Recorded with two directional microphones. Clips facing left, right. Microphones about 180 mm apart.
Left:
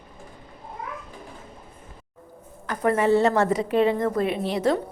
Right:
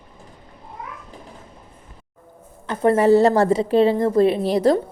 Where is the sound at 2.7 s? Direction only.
30° right (ahead or behind).